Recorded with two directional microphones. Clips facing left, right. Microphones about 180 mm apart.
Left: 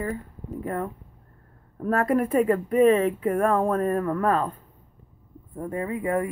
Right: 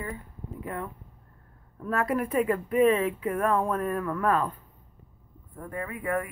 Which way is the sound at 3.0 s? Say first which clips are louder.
Left 5 dB; 50° left (ahead or behind).